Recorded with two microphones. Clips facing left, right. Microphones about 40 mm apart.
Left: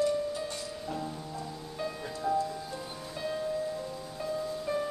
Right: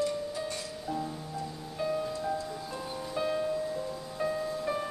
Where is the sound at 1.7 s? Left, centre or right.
Centre.